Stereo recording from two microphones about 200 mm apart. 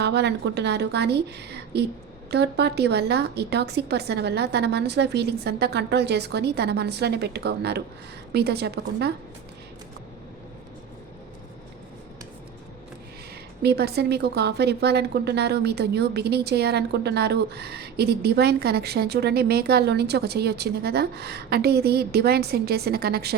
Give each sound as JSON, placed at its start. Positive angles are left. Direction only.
{"t": 0.0, "sound": "a woman's voice", "side_deg": -55}
{"t": 2.3, "sound": "a woman's voice", "side_deg": -55}
{"t": 13.6, "sound": "a woman's voice", "side_deg": -55}